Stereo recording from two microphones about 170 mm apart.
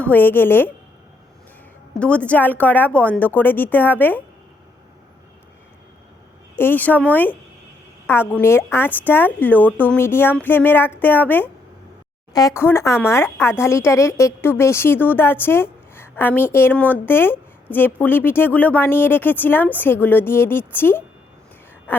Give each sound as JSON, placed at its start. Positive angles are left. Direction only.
{"t": 0.0, "sound": "a woman's voice", "side_deg": 10}
{"t": 2.0, "sound": "a woman's voice", "side_deg": 5}
{"t": 6.6, "sound": "a woman's voice", "side_deg": 10}
{"t": 21.9, "sound": "a sound", "side_deg": 10}